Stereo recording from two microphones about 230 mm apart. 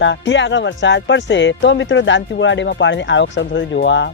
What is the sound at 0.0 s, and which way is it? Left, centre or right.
Speech, left.